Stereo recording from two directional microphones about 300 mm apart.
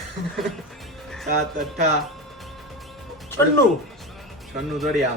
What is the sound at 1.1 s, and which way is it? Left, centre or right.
Speech, centre.